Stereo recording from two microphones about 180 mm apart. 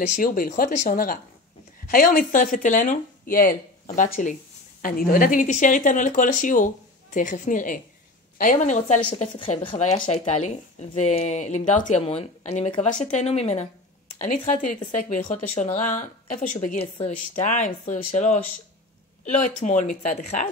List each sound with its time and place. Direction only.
0.0 s a woman's voice: 50° left (ahead or behind)